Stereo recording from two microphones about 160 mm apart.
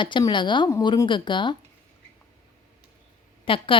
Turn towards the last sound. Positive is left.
turn(degrees=35)  # may be behind; listen again after turning